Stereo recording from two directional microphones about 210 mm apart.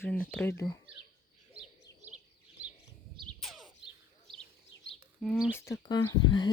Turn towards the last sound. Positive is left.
turn(degrees=20)  # may be behind; listen again after turning